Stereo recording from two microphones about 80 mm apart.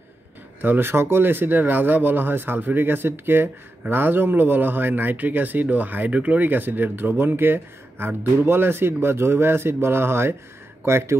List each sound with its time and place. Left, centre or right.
0.6 s speech: right